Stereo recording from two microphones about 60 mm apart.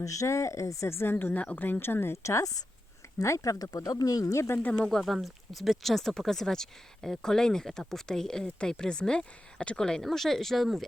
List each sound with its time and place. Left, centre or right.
0.0 s speech: left
1.1 s speech: left
2.2 s speech: left
4.4 s speech: left
4.6 s speech: left
4.9 s speech: centre